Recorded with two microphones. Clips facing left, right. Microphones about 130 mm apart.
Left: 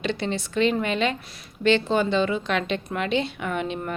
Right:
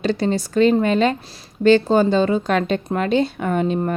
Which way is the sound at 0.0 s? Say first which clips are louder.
Right 7 dB; 40° right (ahead or behind).